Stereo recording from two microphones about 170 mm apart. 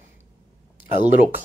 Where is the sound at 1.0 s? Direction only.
10° right (ahead or behind).